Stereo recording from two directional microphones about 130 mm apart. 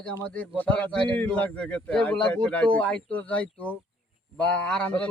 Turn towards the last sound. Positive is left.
turn(degrees=10)  # may be behind; listen again after turning